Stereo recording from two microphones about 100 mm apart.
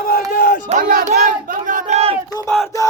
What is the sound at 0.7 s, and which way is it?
Crowd, 90° right.